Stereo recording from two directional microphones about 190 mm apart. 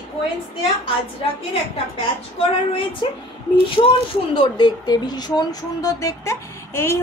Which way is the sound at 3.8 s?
25° left (ahead or behind).